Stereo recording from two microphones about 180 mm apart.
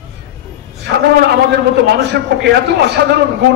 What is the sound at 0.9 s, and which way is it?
A man's voice, 65° right (ahead or behind).